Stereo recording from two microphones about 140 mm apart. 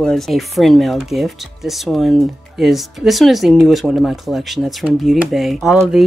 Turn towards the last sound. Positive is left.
turn(degrees=-5)  # may be behind; listen again after turning